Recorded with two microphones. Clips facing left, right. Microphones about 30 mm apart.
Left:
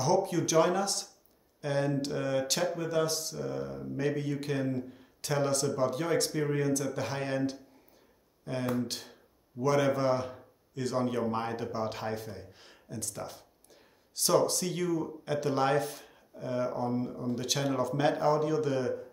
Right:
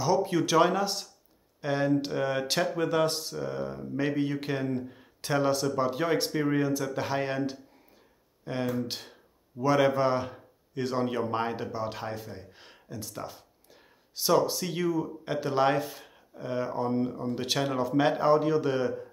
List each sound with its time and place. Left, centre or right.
0.0 s speech: centre
8.8 s a man's voice: right
11.7 s speech: centre
12.4 s a sound: centre
13.0 s speech: centre
18.3 s speech: right